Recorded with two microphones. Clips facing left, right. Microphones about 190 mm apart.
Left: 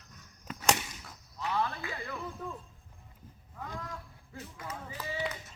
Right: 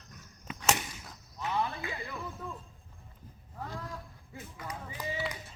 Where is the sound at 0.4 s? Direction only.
5° right (ahead or behind).